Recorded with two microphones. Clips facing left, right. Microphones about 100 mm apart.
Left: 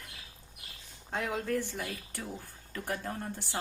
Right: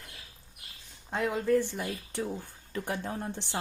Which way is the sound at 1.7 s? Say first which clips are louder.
Right 4 dB; 20° right (ahead or behind).